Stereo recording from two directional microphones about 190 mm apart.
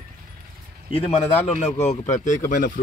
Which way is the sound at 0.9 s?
30° left (ahead or behind).